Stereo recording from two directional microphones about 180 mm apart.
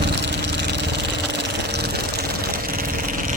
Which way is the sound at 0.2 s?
75° right (ahead or behind).